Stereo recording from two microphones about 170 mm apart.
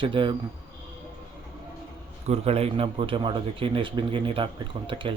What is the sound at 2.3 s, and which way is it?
A man's voice, 35° right (ahead or behind).